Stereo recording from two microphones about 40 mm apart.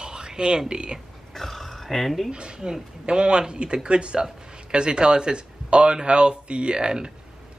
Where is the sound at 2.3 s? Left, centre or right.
Right.